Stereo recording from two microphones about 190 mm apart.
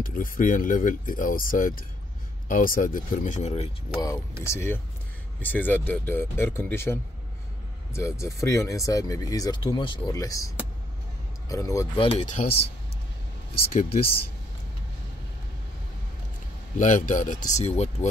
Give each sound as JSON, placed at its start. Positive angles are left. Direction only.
{"t": 0.0, "sound": "speech", "side_deg": 45}
{"t": 4.5, "sound": "speech", "side_deg": 15}
{"t": 12.0, "sound": "speech", "side_deg": 35}
{"t": 16.7, "sound": "speech", "side_deg": 40}